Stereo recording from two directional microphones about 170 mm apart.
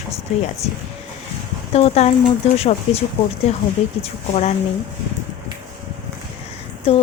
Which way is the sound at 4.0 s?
40° left (ahead or behind).